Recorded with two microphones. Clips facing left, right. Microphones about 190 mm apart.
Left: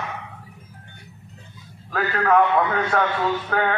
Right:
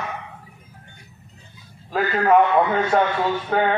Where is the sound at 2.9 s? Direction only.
30° right (ahead or behind).